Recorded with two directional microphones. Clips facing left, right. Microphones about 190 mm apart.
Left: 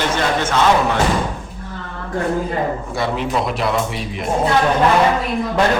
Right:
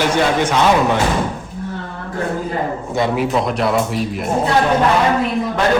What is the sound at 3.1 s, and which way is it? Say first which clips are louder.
A man's voice: right 3 dB; centre (ahead or behind).